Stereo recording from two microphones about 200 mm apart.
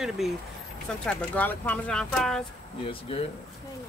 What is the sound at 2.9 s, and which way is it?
Speech, 30° left (ahead or behind).